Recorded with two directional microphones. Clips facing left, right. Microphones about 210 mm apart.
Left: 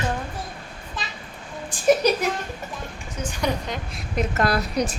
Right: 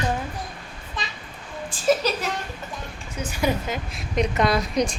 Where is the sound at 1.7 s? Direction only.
15° left (ahead or behind).